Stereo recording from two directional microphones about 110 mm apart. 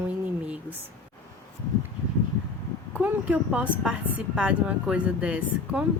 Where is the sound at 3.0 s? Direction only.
10° right (ahead or behind).